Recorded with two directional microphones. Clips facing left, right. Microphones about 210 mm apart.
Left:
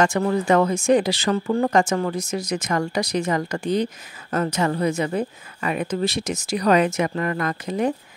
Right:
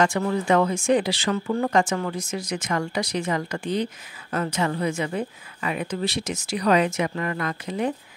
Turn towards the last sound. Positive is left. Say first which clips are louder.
# left 3 dB
turn(degrees=45)  # may be behind; listen again after turning